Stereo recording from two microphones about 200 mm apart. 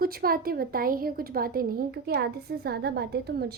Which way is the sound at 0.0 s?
50° right (ahead or behind).